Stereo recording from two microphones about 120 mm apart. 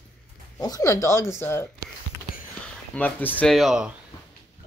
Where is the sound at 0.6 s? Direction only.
30° left (ahead or behind).